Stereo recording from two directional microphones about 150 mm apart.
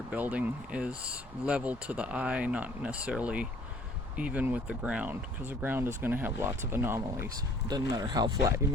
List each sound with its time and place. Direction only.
0.1 s speech: 10° right (ahead or behind)
7.7 s speech: 25° right (ahead or behind)